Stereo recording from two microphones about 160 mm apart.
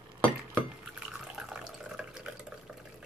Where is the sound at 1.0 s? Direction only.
5° right (ahead or behind).